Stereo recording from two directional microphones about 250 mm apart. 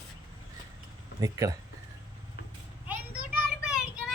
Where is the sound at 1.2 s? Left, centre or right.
Centre.